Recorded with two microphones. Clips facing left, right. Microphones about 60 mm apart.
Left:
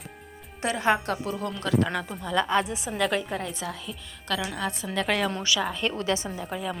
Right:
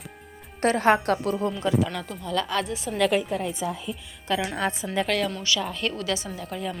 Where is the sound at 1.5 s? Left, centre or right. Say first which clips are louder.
Right 5 dB; centre.